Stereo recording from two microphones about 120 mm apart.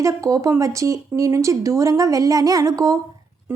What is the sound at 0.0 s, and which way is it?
A woman's voice, 25° right (ahead or behind).